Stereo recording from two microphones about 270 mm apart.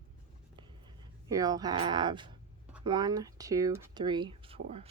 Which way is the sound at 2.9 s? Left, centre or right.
Centre.